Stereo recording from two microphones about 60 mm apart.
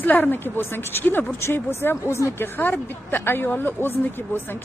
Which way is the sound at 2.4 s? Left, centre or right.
Left.